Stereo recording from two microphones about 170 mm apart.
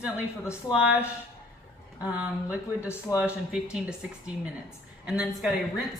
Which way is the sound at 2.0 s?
5° right (ahead or behind).